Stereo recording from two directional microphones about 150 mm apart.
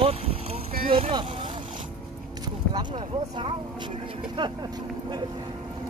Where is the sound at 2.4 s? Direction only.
30° right (ahead or behind).